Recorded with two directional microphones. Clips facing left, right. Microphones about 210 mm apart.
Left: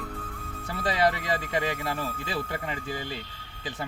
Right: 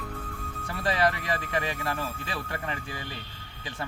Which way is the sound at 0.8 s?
20° left (ahead or behind).